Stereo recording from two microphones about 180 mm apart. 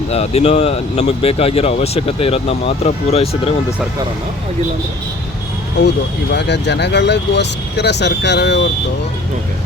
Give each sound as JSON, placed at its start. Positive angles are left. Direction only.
{"t": 0.1, "sound": "speech", "side_deg": 35}
{"t": 5.8, "sound": "speech", "side_deg": 70}